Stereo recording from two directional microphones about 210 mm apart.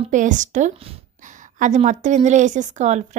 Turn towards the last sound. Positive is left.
turn(degrees=-35)  # may be behind; listen again after turning